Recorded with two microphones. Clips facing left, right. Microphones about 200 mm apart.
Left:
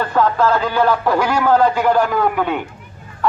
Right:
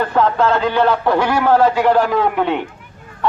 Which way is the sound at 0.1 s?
25° right (ahead or behind).